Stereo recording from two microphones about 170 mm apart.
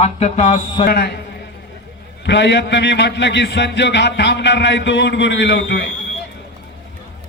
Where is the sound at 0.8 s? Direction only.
75° left (ahead or behind).